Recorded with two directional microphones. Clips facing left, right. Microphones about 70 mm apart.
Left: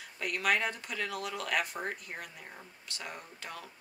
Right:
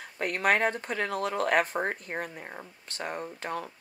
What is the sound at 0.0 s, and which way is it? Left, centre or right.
Speech, right.